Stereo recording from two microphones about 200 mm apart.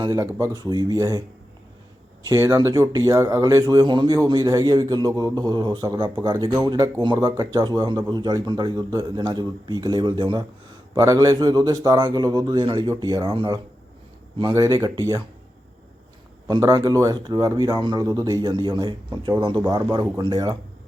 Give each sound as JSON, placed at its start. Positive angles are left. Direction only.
{"t": 0.0, "sound": "speech", "side_deg": -20}
{"t": 2.2, "sound": "speech", "side_deg": -15}
{"t": 16.5, "sound": "speech", "side_deg": -20}